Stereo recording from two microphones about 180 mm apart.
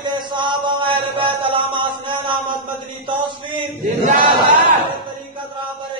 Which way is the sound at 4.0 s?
45° right (ahead or behind).